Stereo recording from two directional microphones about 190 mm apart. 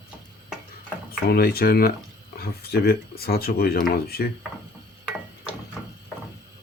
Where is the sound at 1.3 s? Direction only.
55° left (ahead or behind).